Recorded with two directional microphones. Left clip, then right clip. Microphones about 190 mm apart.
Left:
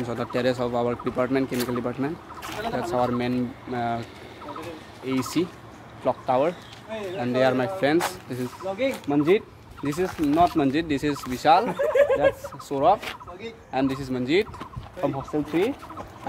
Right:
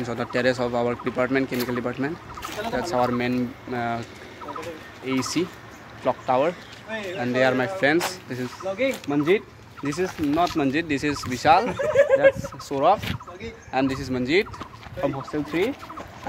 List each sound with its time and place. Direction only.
0.0 s speech: centre (ahead or behind)
5.2 s speech: centre (ahead or behind)
8.7 s speech: 15° left (ahead or behind)
9.1 s speech: 5° left (ahead or behind)
11.6 s speech: 15° left (ahead or behind); by 14.5 s 10° right (ahead or behind)
15.0 s speech: 5° left (ahead or behind)